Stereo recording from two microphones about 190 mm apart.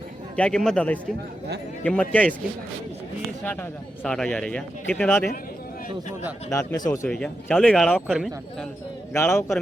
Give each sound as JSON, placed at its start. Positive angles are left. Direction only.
{"t": 0.3, "sound": "speech", "side_deg": 5}
{"t": 3.4, "sound": "speech", "side_deg": 10}
{"t": 6.5, "sound": "speech", "side_deg": 15}
{"t": 7.1, "sound": "speech", "side_deg": 5}
{"t": 9.1, "sound": "speech", "side_deg": 10}